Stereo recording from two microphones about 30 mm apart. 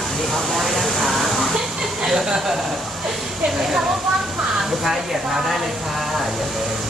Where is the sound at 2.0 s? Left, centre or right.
Centre.